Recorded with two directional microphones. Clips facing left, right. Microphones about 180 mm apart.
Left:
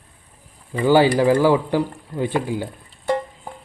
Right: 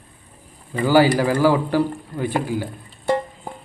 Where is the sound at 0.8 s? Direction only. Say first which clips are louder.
Left 1 dB; 20° left (ahead or behind).